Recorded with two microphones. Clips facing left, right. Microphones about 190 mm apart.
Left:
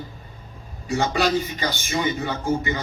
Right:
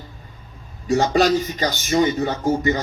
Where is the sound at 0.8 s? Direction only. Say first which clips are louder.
Right 5 dB; 45° right (ahead or behind).